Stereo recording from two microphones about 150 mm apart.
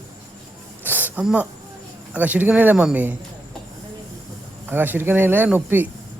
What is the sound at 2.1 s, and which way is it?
Speech, 10° right (ahead or behind).